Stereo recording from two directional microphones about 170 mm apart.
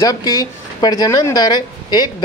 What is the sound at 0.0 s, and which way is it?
Speech, 20° left (ahead or behind).